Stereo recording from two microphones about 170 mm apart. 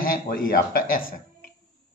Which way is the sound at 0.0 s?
55° left (ahead or behind).